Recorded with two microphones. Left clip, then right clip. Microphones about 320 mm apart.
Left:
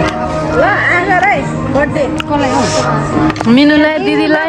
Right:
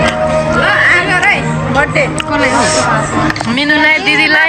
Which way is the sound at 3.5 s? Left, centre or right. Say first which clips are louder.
Left 1 dB; centre.